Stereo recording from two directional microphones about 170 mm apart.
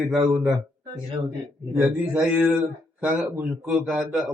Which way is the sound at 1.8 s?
5° right (ahead or behind).